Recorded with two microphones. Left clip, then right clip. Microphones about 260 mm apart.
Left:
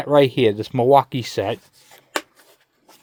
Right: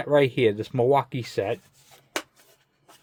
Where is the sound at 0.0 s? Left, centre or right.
Left.